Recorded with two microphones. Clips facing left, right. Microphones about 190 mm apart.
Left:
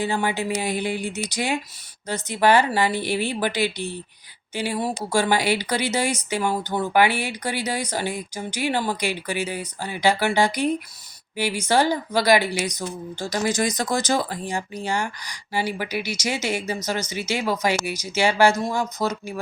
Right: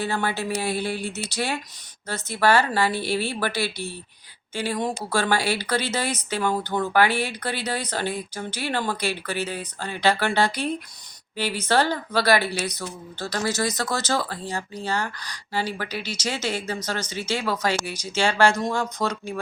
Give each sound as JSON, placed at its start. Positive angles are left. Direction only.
{"t": 0.0, "sound": "a woman's voice", "side_deg": 15}